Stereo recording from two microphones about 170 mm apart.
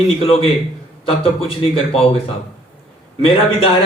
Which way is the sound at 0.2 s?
35° left (ahead or behind).